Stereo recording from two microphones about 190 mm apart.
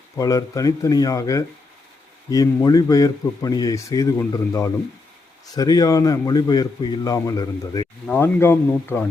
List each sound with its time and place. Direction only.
0.2 s a man's voice: 20° left (ahead or behind)
8.0 s a man's voice: 10° left (ahead or behind)